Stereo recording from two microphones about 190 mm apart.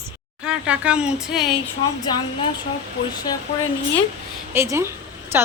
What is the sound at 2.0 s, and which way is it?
Speech, 25° left (ahead or behind).